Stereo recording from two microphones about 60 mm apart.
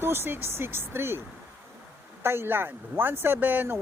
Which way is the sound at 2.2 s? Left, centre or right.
Right.